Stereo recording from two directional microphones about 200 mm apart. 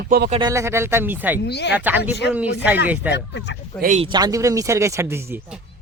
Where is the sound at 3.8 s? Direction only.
40° right (ahead or behind).